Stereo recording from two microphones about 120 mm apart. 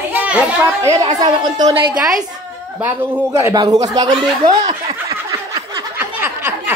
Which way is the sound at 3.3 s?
25° right (ahead or behind).